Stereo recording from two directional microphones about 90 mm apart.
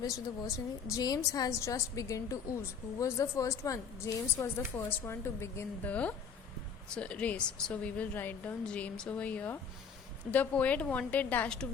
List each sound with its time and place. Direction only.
0.0 s a woman's voice: 35° left (ahead or behind)
5.8 s a woman's voice: 15° left (ahead or behind)